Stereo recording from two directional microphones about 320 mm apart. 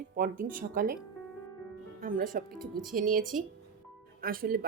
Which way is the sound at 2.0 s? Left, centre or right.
Right.